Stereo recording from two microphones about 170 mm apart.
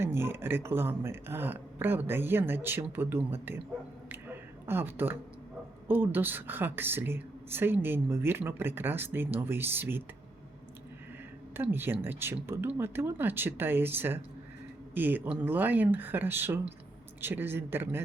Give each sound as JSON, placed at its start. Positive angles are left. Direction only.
{"t": 0.0, "sound": "a woman's voice", "side_deg": -15}
{"t": 4.1, "sound": "a sound", "side_deg": -15}
{"t": 5.9, "sound": "a woman's voice", "side_deg": -10}
{"t": 11.5, "sound": "a woman's voice", "side_deg": -15}